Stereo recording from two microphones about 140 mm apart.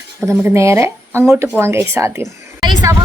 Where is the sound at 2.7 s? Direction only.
30° right (ahead or behind).